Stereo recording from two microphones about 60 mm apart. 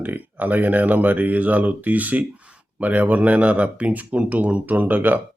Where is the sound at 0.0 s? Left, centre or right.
Right.